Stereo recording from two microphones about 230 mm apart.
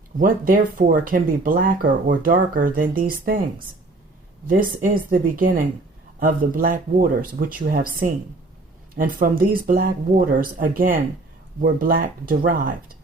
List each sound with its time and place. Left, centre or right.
0.2 s speech: right
4.4 s speech: right